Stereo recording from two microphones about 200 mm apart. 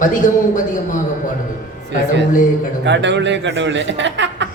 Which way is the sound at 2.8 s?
60° right (ahead or behind).